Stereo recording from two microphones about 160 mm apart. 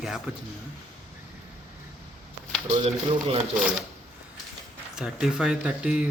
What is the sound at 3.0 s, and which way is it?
Speech, 35° right (ahead or behind).